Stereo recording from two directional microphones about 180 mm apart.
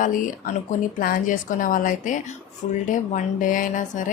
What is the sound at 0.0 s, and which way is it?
A woman's voice, 45° left (ahead or behind).